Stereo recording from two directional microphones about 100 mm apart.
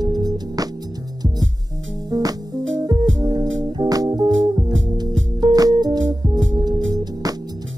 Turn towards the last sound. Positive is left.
turn(degrees=-40)  # may be behind; listen again after turning